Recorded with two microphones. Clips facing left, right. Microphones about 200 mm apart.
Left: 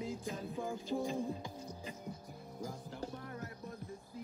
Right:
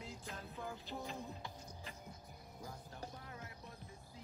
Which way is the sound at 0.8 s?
45° left (ahead or behind).